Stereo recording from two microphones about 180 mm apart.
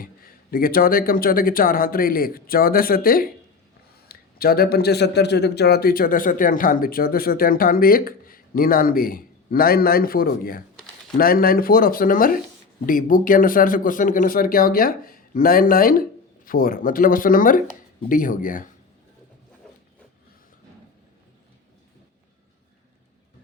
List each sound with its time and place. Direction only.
0.0 s speech: 55° left (ahead or behind)